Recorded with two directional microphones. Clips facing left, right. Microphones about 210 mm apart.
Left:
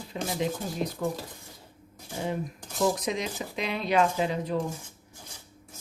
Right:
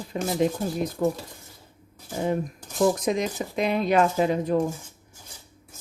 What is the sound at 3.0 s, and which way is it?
A woman's voice, 45° right (ahead or behind).